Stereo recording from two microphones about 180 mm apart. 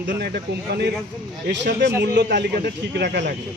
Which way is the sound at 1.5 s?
80° right.